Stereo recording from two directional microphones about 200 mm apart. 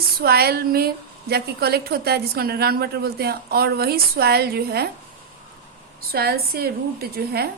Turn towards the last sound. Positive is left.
turn(degrees=-50)  # may be behind; listen again after turning